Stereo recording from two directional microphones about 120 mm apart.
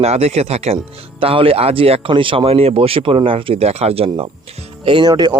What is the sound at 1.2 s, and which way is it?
A man's voice, 50° right (ahead or behind).